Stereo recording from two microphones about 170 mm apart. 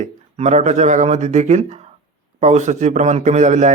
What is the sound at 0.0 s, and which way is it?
A man's voice, 45° right (ahead or behind).